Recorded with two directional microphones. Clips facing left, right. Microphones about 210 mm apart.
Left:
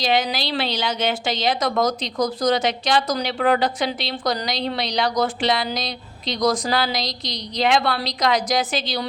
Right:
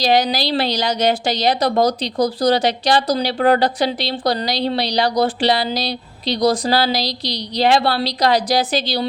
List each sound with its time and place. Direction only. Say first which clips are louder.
0.0 s a woman's voice: right 5 dB; 35° right (ahead or behind)